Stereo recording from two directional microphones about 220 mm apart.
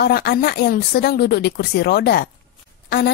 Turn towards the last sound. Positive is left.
turn(degrees=45)  # may be behind; listen again after turning